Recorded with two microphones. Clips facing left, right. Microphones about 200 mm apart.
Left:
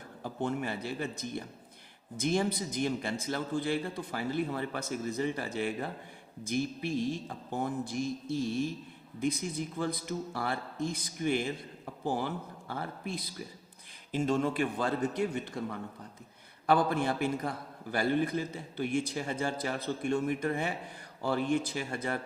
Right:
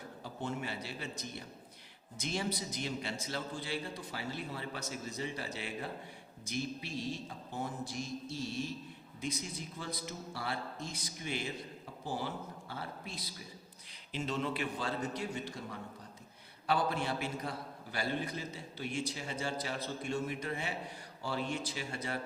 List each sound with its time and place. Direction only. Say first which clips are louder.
0.2 s a man's voice: left 7 dB; 50° left (ahead or behind)
16.6 s a man's voice: left 6 dB; 50° left (ahead or behind)